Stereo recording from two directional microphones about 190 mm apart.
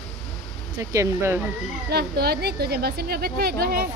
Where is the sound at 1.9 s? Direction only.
55° right (ahead or behind).